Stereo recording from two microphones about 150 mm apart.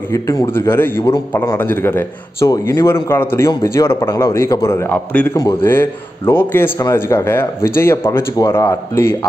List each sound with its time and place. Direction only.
0.1 s a man's voice: 20° left (ahead or behind)
5.3 s a man's voice: 25° left (ahead or behind)